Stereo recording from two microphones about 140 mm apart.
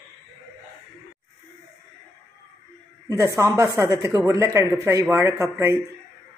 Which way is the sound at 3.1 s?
25° right (ahead or behind).